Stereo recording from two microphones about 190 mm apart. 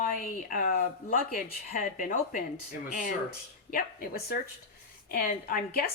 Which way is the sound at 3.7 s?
50° left (ahead or behind).